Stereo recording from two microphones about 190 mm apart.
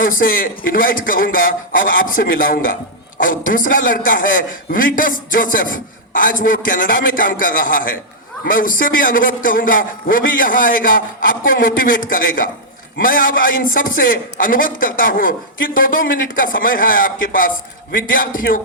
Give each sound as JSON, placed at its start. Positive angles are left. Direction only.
{"t": 0.0, "sound": "a man's voice", "side_deg": 45}